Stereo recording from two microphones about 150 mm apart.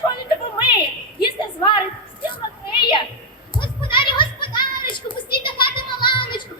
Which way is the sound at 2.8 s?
35° left (ahead or behind).